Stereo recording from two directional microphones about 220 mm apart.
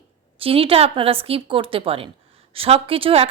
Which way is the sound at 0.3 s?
25° right (ahead or behind).